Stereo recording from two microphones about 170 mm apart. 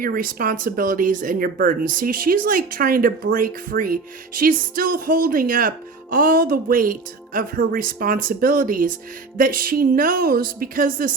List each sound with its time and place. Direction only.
0.0 s speech: 55° right (ahead or behind)